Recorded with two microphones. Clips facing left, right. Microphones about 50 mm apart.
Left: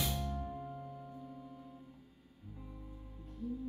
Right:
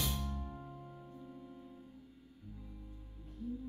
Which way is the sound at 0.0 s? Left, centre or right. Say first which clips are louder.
Left 2 dB; centre.